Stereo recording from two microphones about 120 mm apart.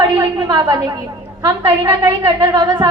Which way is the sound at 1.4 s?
20° right (ahead or behind).